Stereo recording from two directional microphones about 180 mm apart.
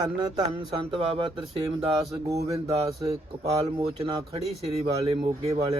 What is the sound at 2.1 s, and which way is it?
Speech, 20° right (ahead or behind).